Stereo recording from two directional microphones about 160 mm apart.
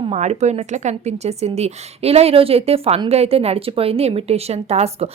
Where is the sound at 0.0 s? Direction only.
45° right (ahead or behind).